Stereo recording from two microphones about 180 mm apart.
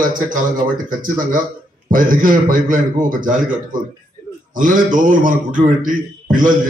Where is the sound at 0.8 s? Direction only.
50° right (ahead or behind).